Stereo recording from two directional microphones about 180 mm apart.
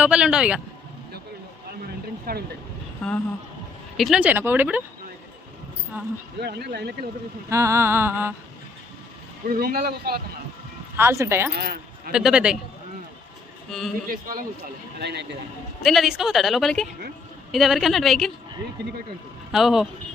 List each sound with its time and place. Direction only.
0.0 s a woman's voice: 5° right (ahead or behind)
2.3 s a man's voice: 55° right (ahead or behind)
3.0 s speech: 10° left (ahead or behind); by 4.8 s 10° right (ahead or behind)
6.0 s speech: 10° right (ahead or behind)
6.4 s a man's voice: 65° right (ahead or behind)
7.5 s speech: 15° right (ahead or behind)
9.5 s a man's voice: 55° right (ahead or behind)
10.9 s speech: 15° right (ahead or behind)
11.5 s speech: 60° right (ahead or behind)
12.1 s a woman's voice: 5° right (ahead or behind)
13.7 s a man's voice: centre (ahead or behind)
14.1 s a man's voice: 55° right (ahead or behind); by 15.4 s 70° right (ahead or behind)
15.8 s a woman's voice: centre (ahead or behind)
19.5 s a woman's voice: centre (ahead or behind)